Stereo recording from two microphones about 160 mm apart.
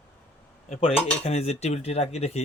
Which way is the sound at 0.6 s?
45° left (ahead or behind).